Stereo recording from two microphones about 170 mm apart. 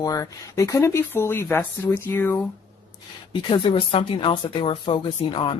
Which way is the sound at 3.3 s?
30° left (ahead or behind).